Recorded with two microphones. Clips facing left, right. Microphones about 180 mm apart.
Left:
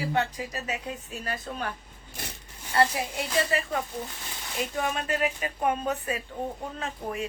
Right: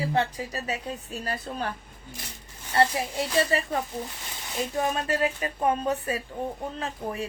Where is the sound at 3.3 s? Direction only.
35° right (ahead or behind).